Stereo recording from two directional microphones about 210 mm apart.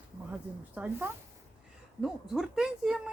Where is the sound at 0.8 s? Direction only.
10° right (ahead or behind).